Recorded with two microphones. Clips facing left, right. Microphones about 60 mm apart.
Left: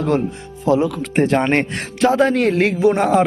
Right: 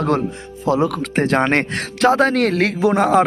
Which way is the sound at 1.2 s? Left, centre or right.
Right.